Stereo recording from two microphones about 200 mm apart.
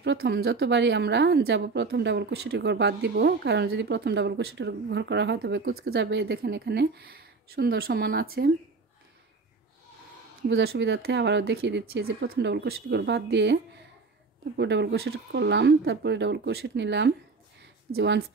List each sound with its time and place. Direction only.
0.0 s a woman's voice: 60° right (ahead or behind)
10.5 s a woman's voice: 55° right (ahead or behind)
14.6 s a woman's voice: 60° right (ahead or behind)